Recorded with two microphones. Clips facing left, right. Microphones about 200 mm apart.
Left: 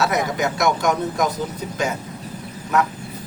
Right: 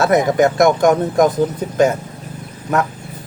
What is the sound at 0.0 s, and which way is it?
Speech, 50° right (ahead or behind).